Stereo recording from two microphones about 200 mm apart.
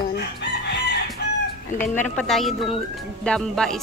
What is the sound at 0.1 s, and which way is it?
Chicken, 60° left (ahead or behind).